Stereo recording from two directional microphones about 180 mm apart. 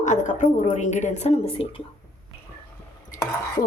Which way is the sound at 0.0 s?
40° left (ahead or behind).